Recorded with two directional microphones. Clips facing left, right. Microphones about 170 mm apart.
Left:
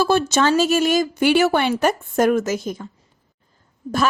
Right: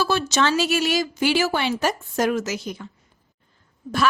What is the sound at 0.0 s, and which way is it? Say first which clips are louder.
Speech: left 4 dB; 50° left (ahead or behind).